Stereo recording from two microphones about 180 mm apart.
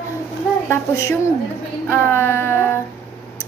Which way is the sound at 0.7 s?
15° left (ahead or behind).